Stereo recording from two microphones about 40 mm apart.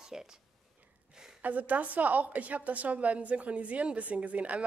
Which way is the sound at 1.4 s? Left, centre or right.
Right.